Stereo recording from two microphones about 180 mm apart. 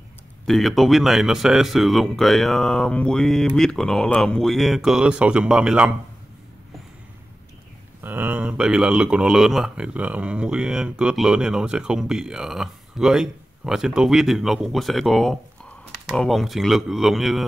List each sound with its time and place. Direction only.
0.5 s speech: centre (ahead or behind)
8.0 s speech: 10° right (ahead or behind)